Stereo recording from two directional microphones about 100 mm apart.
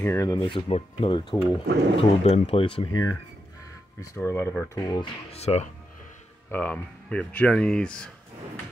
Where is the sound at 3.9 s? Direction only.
30° left (ahead or behind).